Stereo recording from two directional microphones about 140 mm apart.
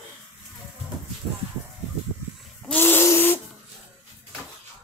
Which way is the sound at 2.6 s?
10° left (ahead or behind).